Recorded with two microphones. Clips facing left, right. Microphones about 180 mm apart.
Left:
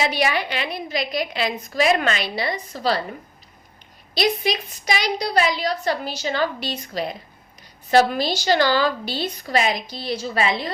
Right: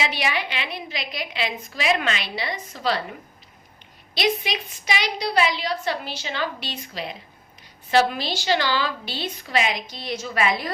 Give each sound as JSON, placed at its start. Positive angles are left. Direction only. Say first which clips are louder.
{"t": 0.0, "sound": "a woman's voice", "louder": "left 4 dB", "side_deg": 40}
{"t": 4.1, "sound": "a woman's voice", "louder": "left 3 dB", "side_deg": 40}